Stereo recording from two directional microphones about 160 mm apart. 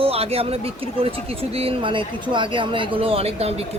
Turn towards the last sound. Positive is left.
turn(degrees=-40)  # may be behind; listen again after turning